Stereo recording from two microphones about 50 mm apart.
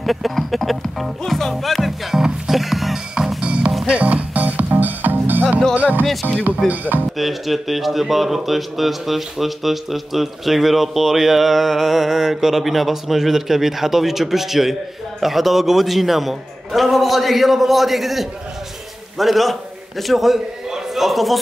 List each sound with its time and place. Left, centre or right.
0.0 s music: centre
3.3 s music: right
6.7 s speech: right
7.2 s a man's voice: centre